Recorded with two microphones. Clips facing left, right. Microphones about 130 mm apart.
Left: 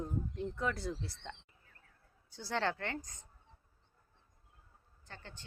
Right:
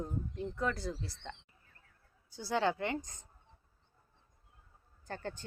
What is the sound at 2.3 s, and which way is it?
Speech, 10° right (ahead or behind).